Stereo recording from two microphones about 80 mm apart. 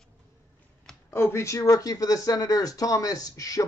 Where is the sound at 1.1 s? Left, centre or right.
Left.